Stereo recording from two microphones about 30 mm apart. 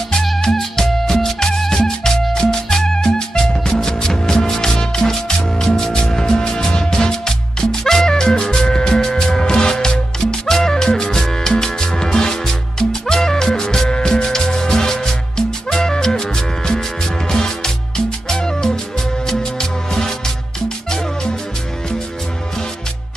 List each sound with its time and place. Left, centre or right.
0.5 s music: centre